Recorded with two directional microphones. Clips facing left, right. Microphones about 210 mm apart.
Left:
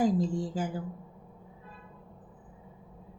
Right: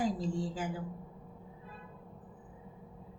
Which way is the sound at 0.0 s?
45° left (ahead or behind).